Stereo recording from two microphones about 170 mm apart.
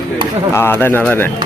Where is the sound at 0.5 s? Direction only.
15° left (ahead or behind).